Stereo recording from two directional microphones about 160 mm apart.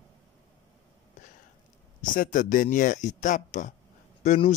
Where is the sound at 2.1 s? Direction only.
55° left (ahead or behind).